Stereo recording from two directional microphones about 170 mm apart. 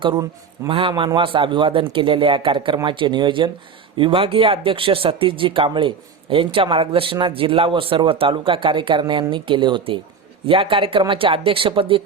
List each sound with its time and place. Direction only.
0.0 s a man's voice: 25° right (ahead or behind)